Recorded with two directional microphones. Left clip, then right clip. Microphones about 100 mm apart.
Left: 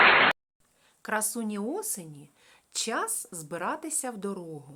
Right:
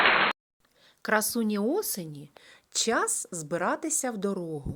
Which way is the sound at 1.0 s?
35° right (ahead or behind).